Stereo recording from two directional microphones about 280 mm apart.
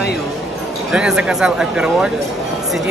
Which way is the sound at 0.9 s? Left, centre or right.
Centre.